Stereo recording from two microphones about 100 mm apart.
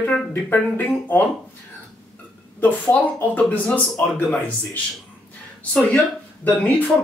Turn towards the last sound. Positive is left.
turn(degrees=15)  # may be behind; listen again after turning